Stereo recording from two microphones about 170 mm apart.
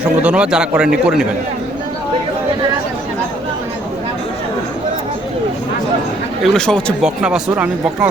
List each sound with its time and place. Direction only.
0.2 s speech: 5° right (ahead or behind)
6.4 s speech: 5° left (ahead or behind)